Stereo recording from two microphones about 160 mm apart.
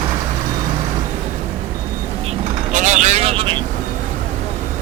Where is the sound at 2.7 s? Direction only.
50° right (ahead or behind).